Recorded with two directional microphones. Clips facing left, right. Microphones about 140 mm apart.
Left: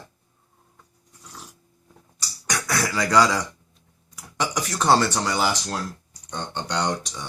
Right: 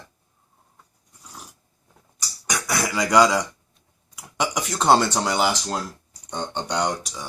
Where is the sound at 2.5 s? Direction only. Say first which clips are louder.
Even; 15° right (ahead or behind).